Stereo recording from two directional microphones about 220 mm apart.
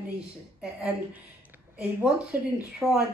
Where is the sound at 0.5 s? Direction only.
5° right (ahead or behind).